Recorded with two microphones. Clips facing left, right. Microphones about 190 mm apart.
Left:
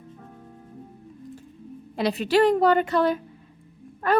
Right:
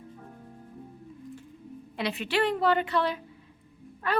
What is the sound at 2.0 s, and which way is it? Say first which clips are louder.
A woman's voice: left 8 dB; 40° left (ahead or behind).